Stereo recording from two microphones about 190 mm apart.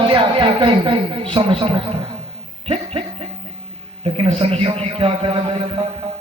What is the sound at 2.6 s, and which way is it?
Chuckle, 30° right (ahead or behind).